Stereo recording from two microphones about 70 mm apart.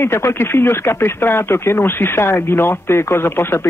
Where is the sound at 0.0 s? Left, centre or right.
Left.